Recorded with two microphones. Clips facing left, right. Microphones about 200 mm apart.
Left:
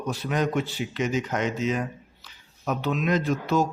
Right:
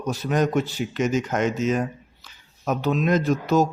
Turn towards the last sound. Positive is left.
turn(degrees=-45)  # may be behind; listen again after turning